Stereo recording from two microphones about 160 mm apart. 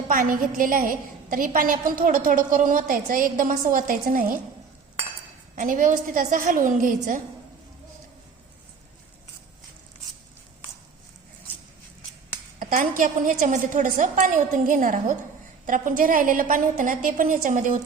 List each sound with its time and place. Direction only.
0.1 s a woman's voice: 60° right (ahead or behind)
5.5 s a woman's voice: 55° right (ahead or behind)
12.5 s a woman's voice: 55° right (ahead or behind)